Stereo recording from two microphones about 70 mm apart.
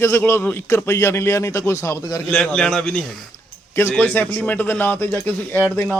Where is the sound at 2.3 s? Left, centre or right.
Centre.